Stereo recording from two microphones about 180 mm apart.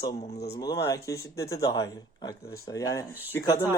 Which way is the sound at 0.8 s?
15° left (ahead or behind).